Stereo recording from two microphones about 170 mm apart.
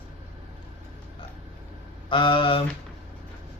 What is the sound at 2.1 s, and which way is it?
Speech, 30° left (ahead or behind).